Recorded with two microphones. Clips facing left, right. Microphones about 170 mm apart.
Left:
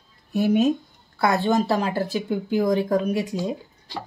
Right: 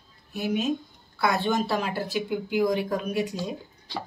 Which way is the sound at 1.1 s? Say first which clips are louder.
Left 4 dB; 45° left (ahead or behind).